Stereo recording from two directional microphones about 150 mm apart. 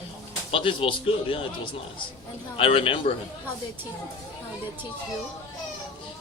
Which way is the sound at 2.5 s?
35° left (ahead or behind).